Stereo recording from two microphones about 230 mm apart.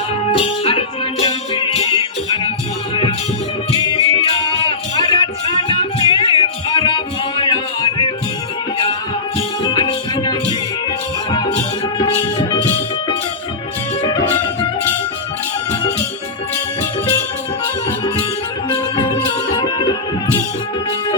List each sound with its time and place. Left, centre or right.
0.3 s music: left
9.6 s music: left
18.7 s music: centre